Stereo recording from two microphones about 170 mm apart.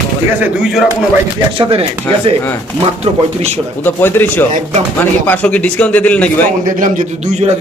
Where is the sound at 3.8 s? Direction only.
10° left (ahead or behind).